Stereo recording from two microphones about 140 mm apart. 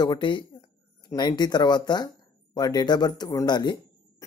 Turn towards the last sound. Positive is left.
turn(degrees=30)  # may be behind; listen again after turning